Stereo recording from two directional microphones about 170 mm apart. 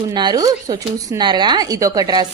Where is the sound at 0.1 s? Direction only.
25° right (ahead or behind).